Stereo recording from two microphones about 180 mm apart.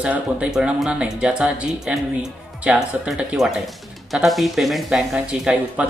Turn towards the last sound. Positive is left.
turn(degrees=-5)  # may be behind; listen again after turning